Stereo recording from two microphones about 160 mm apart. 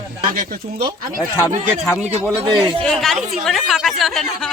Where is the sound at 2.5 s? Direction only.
30° right (ahead or behind).